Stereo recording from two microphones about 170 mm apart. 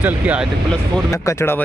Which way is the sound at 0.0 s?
10° right (ahead or behind).